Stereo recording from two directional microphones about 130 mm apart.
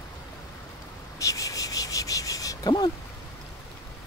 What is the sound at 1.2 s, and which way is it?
Cricket, 25° left (ahead or behind).